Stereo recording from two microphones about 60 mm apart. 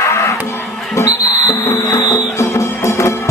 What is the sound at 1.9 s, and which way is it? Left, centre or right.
Music, left.